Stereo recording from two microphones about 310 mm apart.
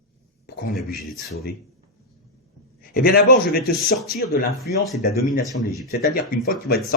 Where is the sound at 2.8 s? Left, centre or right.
Left.